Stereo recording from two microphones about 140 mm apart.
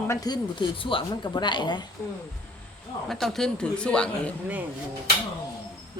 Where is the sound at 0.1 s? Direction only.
30° left (ahead or behind).